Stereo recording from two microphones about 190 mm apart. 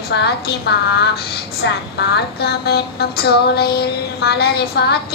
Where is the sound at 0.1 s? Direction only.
60° left (ahead or behind).